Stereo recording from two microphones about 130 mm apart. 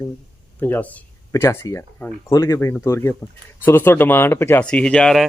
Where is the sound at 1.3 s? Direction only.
25° left (ahead or behind).